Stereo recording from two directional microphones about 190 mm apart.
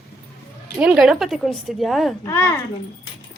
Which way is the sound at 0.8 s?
5° right (ahead or behind).